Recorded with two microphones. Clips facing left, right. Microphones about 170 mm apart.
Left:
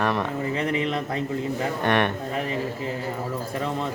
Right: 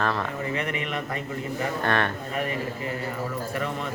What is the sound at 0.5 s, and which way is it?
Speech, 30° left (ahead or behind).